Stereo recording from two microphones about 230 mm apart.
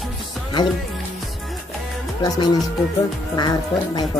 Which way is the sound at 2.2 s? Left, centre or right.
Centre.